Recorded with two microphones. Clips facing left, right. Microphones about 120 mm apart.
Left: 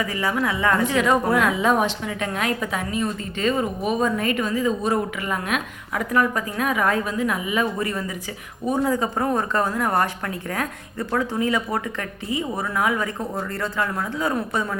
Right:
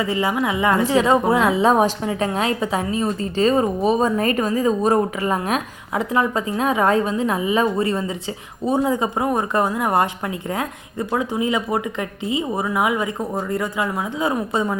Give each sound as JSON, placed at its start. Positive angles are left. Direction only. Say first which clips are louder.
{"t": 0.0, "sound": "a woman's voice", "louder": "right 3 dB", "side_deg": -20}
{"t": 0.9, "sound": "a woman's voice", "louder": "right 3 dB", "side_deg": -30}